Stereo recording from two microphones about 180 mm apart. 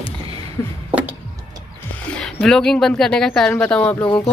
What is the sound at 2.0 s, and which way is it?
Speech, 5° left (ahead or behind).